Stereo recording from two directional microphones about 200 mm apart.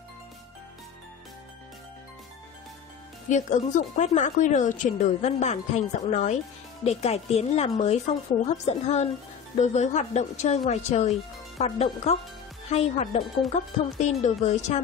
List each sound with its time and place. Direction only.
3.3 s speech: 35° left (ahead or behind)